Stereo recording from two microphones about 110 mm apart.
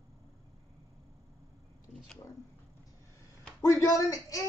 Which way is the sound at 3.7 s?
30° left (ahead or behind).